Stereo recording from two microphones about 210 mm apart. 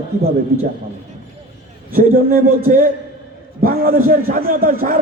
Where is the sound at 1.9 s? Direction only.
40° right (ahead or behind).